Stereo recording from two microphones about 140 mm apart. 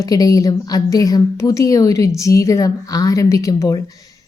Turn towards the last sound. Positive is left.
turn(degrees=25)  # may be behind; listen again after turning